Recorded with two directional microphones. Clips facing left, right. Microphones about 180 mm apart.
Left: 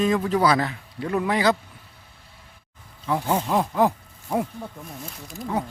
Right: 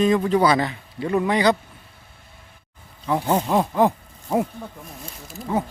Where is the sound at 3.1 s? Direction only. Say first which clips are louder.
Right 3 dB; 10° right (ahead or behind).